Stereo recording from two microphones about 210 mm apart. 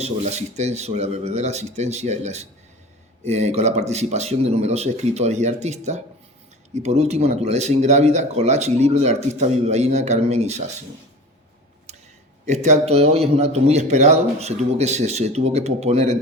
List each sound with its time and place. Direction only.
0.0 s speech: 30° right (ahead or behind)
11.9 s a sound: 30° right (ahead or behind)
12.5 s speech: 35° right (ahead or behind)